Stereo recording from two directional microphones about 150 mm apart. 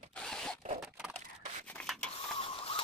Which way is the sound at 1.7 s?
5° left (ahead or behind).